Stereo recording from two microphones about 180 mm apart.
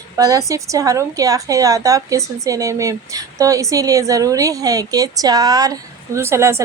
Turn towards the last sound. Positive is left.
turn(degrees=-15)  # may be behind; listen again after turning